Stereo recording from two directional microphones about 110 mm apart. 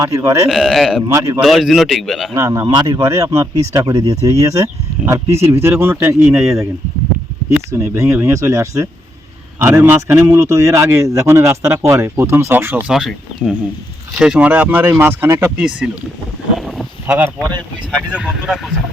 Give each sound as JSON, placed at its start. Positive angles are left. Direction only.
{"t": 0.0, "sound": "speech", "side_deg": -30}
{"t": 0.4, "sound": "speech", "side_deg": 0}
{"t": 1.0, "sound": "speech", "side_deg": -30}
{"t": 1.4, "sound": "speech", "side_deg": 0}
{"t": 2.3, "sound": "speech", "side_deg": -30}
{"t": 7.7, "sound": "speech", "side_deg": -25}
{"t": 12.9, "sound": "speech", "side_deg": -5}
{"t": 15.5, "sound": "speech", "side_deg": -10}
{"t": 16.6, "sound": "a sound", "side_deg": 0}
{"t": 18.1, "sound": "speech", "side_deg": -5}